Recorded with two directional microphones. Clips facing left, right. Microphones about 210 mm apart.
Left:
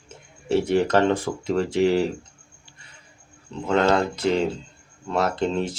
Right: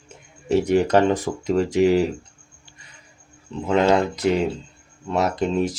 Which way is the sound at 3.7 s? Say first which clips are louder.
Right 2 dB; 10° right (ahead or behind).